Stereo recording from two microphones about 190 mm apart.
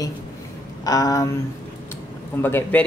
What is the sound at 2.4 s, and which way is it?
Speech, 10° left (ahead or behind).